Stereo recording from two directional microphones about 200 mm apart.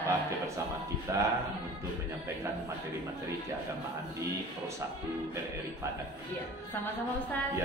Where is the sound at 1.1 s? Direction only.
15° right (ahead or behind).